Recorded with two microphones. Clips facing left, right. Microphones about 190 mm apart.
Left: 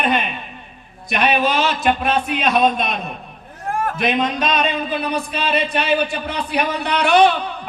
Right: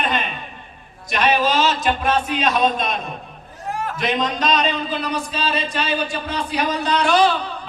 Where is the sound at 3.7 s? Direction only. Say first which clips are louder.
Left 3 dB; 50° left (ahead or behind).